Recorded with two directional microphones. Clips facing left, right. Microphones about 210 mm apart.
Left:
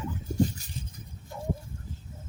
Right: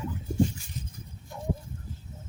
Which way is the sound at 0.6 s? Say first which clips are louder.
Left 1 dB; 40° left (ahead or behind).